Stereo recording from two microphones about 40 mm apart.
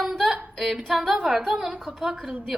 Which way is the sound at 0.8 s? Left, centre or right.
Centre.